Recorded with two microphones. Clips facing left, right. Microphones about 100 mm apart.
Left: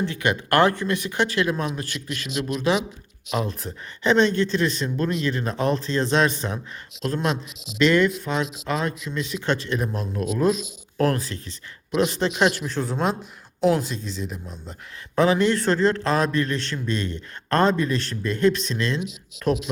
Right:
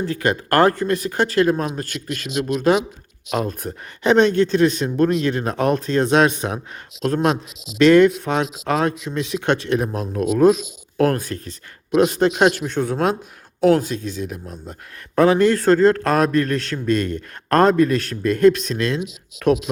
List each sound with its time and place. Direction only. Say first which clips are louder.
0.0 s a man's voice: right 3 dB; 40° right (ahead or behind)
19.5 s speech: right 6 dB; 60° right (ahead or behind)